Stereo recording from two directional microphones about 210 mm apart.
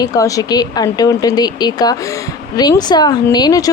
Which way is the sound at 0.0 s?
15° left (ahead or behind).